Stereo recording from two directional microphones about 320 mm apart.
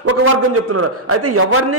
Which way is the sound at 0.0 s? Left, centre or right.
Right.